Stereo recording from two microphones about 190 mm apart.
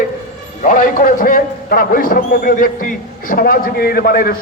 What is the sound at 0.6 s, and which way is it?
A man's voice, 45° left (ahead or behind).